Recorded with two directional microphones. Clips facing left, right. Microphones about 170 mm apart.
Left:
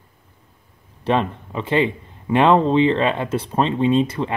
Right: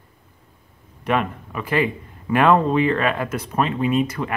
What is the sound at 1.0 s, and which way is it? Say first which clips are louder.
Speech: left 2 dB; 30° left (ahead or behind).